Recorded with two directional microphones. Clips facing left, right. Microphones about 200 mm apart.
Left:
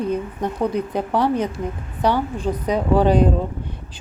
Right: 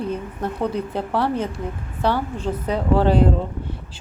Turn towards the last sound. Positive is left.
turn(degrees=15)  # may be behind; listen again after turning